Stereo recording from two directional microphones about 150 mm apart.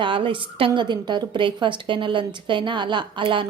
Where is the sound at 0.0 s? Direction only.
35° right (ahead or behind).